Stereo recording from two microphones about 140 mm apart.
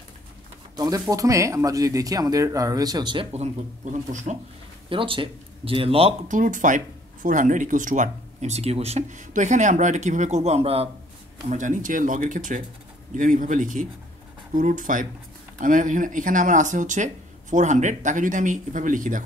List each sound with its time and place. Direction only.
0.7 s speech: 25° right (ahead or behind)
3.3 s speech: 60° right (ahead or behind)
4.8 s speech: 40° right (ahead or behind)
6.2 s speech: 70° right (ahead or behind); by 10.9 s 45° right (ahead or behind)
11.4 s speech: 65° right (ahead or behind)